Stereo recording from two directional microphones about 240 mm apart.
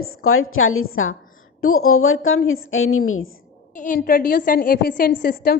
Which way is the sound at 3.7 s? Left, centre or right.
Left.